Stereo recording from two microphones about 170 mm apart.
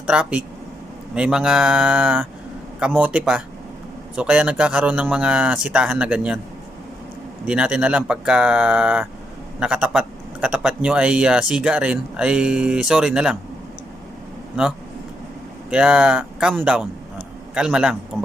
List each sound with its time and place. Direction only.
0.1 s a man's voice: 5° right (ahead or behind)
7.4 s a man's voice: 5° right (ahead or behind)
15.7 s a man's voice: 5° right (ahead or behind)